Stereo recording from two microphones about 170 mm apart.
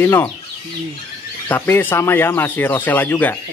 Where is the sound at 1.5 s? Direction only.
10° left (ahead or behind).